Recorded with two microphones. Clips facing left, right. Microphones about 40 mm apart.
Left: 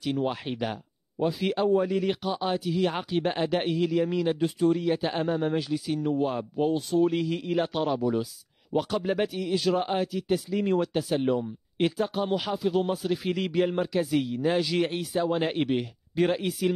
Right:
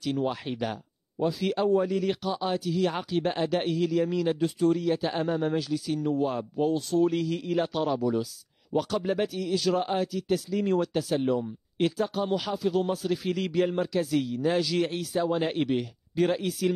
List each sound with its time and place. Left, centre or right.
0.0 s speech: centre